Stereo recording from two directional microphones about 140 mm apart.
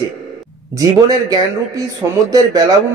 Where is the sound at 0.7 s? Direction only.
25° right (ahead or behind).